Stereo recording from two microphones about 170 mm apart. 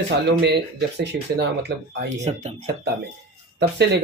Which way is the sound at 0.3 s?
75° right (ahead or behind).